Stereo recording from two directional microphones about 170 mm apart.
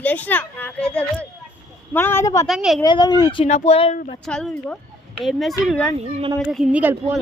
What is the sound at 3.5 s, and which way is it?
Speech, 40° left (ahead or behind).